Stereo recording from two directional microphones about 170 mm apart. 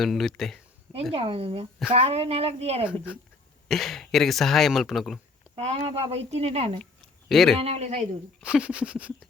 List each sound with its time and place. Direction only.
0.0 s speech: centre (ahead or behind)
1.1 s speech: 35° right (ahead or behind)
3.7 s speech: centre (ahead or behind)
5.6 s speech: 35° right (ahead or behind)
7.3 s speech: centre (ahead or behind)
7.6 s speech: 40° right (ahead or behind)
8.4 s a sound: 5° right (ahead or behind)